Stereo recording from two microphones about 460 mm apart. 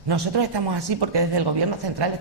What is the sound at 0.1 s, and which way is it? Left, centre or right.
Speech, right.